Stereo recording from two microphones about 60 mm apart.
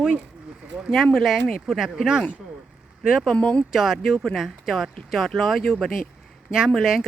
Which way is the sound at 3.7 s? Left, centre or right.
Centre.